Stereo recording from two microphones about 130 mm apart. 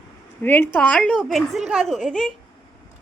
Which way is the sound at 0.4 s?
15° left (ahead or behind).